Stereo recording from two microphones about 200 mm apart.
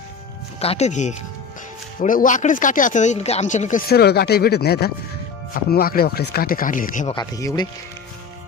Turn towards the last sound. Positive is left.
turn(degrees=20)  # may be behind; listen again after turning